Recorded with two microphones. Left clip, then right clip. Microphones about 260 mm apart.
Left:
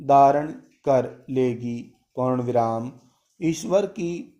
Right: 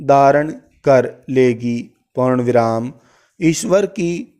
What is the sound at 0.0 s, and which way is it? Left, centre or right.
A man's voice, right.